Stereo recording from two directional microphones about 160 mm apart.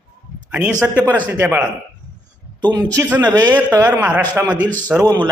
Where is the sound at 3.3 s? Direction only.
25° right (ahead or behind).